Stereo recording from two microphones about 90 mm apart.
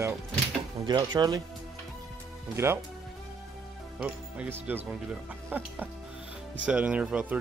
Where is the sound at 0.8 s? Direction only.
55° right (ahead or behind).